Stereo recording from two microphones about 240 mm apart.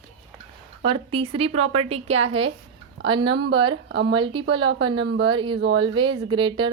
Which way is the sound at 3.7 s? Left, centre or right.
Right.